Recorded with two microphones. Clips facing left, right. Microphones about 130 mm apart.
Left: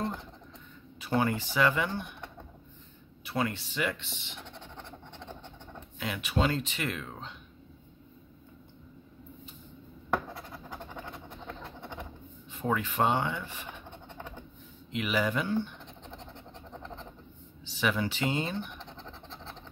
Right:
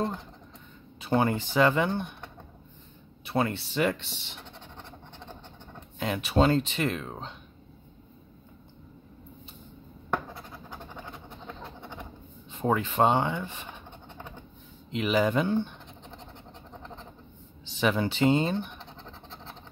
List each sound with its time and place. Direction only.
0.9 s speech: 25° right (ahead or behind)
3.3 s speech: 30° right (ahead or behind)
5.9 s speech: 30° right (ahead or behind)
12.4 s speech: 25° right (ahead or behind)
14.9 s speech: 30° right (ahead or behind)
17.6 s speech: 25° right (ahead or behind)